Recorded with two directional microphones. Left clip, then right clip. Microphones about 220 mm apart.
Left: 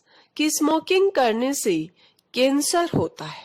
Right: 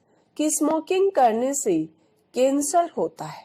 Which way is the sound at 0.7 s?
25° left (ahead or behind).